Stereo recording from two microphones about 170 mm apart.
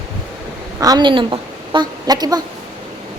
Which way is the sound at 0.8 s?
25° right (ahead or behind).